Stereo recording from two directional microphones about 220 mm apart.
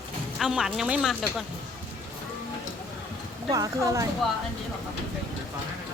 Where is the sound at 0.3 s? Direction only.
Centre (ahead or behind).